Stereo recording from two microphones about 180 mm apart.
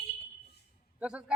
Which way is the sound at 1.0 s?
5° right (ahead or behind).